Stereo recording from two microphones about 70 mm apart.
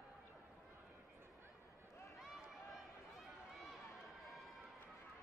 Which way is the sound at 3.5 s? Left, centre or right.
Centre.